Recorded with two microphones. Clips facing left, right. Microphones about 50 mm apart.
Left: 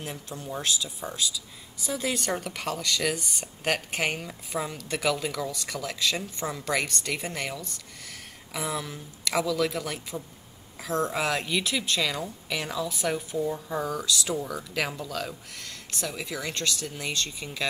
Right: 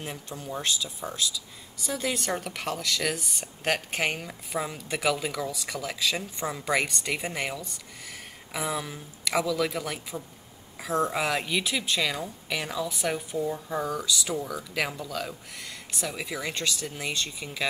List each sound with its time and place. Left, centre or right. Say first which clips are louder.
0.0 s speech: even; centre
10.8 s speech: right 1 dB; centre
11.1 s speech: even; centre